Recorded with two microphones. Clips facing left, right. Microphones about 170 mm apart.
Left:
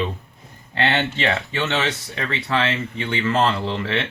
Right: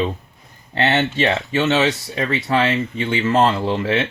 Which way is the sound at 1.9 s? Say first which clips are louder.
Right 5 dB; 25° right (ahead or behind).